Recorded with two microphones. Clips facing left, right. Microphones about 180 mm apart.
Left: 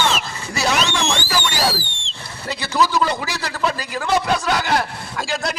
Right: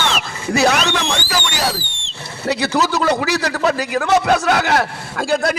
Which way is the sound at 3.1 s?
55° right (ahead or behind).